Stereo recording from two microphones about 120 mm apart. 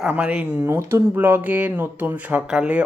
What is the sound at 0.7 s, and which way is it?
Speech, 20° right (ahead or behind).